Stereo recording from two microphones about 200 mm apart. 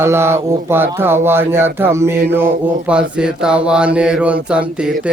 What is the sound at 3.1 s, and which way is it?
Mantra, 5° right (ahead or behind).